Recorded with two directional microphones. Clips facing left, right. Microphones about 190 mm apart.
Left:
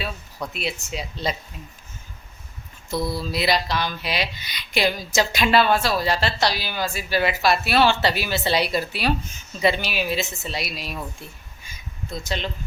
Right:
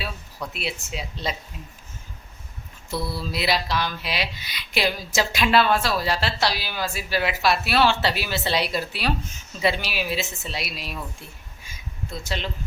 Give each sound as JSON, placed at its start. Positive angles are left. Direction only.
{"t": 0.5, "sound": "speech", "side_deg": -5}
{"t": 2.9, "sound": "mantra", "side_deg": 15}
{"t": 3.2, "sound": "speech", "side_deg": 0}
{"t": 11.6, "sound": "a sound", "side_deg": 0}